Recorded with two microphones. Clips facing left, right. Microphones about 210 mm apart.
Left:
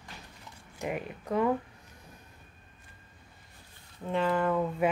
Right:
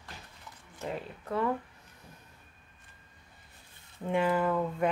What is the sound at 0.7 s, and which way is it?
Speech, 15° left (ahead or behind).